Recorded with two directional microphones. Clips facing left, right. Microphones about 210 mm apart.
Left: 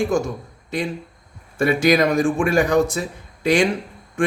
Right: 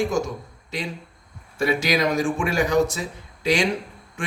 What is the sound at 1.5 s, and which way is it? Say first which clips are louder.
Speech: left 5 dB; 55° left (ahead or behind).